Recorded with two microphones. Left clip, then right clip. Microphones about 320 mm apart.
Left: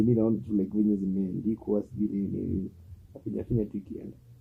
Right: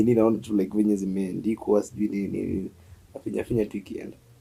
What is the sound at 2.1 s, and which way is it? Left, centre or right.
Speech, right.